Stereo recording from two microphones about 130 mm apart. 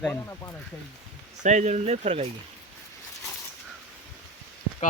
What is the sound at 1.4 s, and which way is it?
Speech, 70° right (ahead or behind).